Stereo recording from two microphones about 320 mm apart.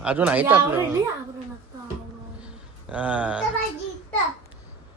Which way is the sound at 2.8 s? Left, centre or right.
Centre.